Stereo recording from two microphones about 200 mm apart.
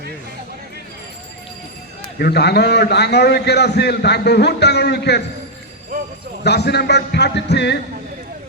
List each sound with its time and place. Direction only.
2.1 s a man's voice: 55° left (ahead or behind)
6.4 s a man's voice: 55° left (ahead or behind)